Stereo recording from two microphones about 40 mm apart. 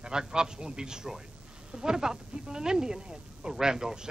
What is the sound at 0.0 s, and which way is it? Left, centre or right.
A woman's voice, centre.